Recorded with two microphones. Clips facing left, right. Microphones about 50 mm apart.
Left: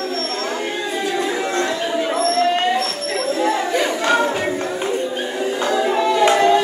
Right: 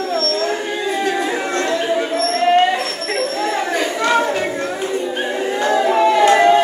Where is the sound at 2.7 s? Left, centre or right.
Right.